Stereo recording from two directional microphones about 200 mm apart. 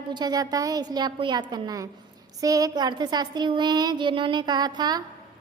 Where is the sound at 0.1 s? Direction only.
20° right (ahead or behind).